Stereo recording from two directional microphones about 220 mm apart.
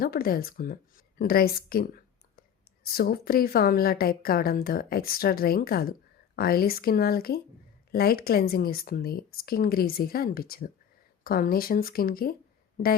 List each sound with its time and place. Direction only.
0.0 s a woman's voice: 45° left (ahead or behind)
2.9 s a woman's voice: 45° left (ahead or behind)